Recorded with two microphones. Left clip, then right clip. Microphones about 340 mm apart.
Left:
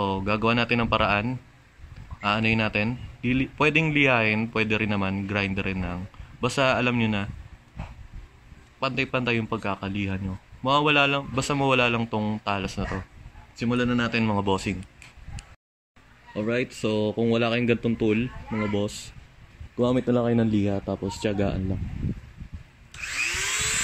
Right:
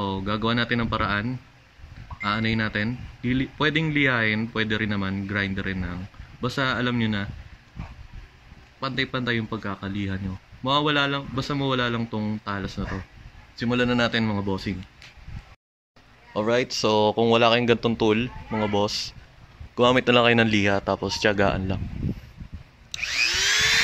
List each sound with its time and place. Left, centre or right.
0.0 s speech: centre
8.7 s speech: centre
16.3 s speech: centre
18.6 s speech: right
20.4 s speech: right
20.7 s speech: right
21.2 s speech: centre